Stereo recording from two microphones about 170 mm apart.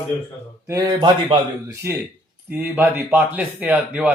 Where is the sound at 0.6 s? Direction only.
25° right (ahead or behind).